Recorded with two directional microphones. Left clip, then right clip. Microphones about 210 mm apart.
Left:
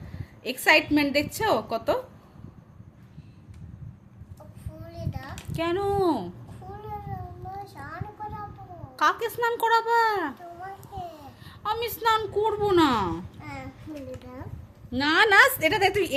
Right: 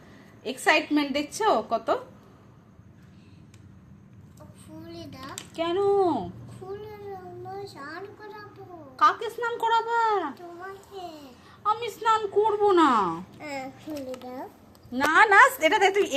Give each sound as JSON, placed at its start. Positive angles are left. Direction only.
{"t": 0.6, "sound": "a woman's voice", "side_deg": 15}
{"t": 4.9, "sound": "a sound", "side_deg": 10}
{"t": 5.5, "sound": "a woman's voice", "side_deg": 20}
{"t": 7.6, "sound": "a sound", "side_deg": 0}
{"t": 9.0, "sound": "a woman's voice", "side_deg": 25}
{"t": 11.6, "sound": "a woman's voice", "side_deg": 25}
{"t": 13.9, "sound": "a child's voice", "side_deg": -30}
{"t": 14.9, "sound": "a woman's voice", "side_deg": 25}
{"t": 15.5, "sound": "a woman's voice", "side_deg": 10}